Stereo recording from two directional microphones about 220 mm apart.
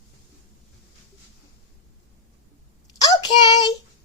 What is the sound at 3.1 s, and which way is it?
Child singing, 20° left (ahead or behind).